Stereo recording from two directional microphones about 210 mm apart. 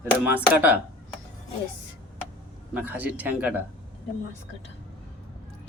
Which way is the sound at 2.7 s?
10° right (ahead or behind).